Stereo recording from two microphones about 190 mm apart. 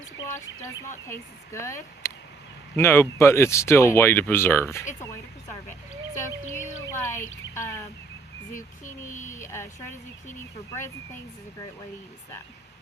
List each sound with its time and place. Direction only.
0.3 s speech: 15° left (ahead or behind)
6.5 s speech: 15° left (ahead or behind)
9.2 s speech: 15° left (ahead or behind)